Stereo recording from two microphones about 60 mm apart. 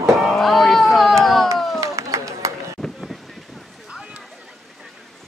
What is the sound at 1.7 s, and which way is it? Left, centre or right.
Run, right.